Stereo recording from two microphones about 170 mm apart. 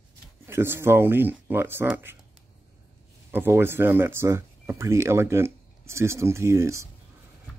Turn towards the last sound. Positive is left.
turn(degrees=-15)  # may be behind; listen again after turning